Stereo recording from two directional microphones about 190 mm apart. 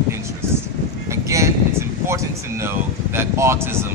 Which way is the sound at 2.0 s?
15° right (ahead or behind).